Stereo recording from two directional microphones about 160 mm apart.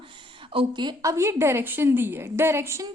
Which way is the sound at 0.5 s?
30° right (ahead or behind).